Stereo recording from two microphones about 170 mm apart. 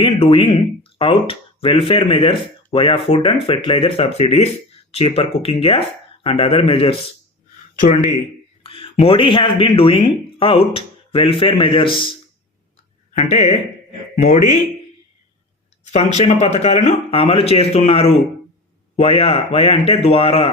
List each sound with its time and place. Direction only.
0.0 s speech: 30° left (ahead or behind)
8.6 s speech: 30° left (ahead or behind)
13.1 s speech: 45° left (ahead or behind)
15.9 s speech: 40° left (ahead or behind)